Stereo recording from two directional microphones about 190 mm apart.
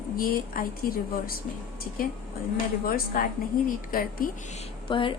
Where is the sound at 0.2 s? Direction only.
50° left (ahead or behind).